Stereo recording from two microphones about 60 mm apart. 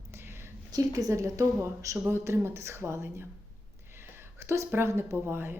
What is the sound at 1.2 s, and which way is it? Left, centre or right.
Speech, right.